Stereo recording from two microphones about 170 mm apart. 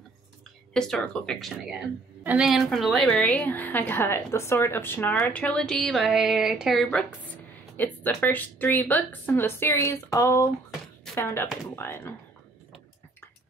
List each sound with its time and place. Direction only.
0.7 s a woman's voice: 5° left (ahead or behind)